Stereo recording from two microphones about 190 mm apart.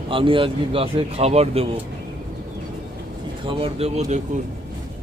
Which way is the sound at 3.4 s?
30° right (ahead or behind).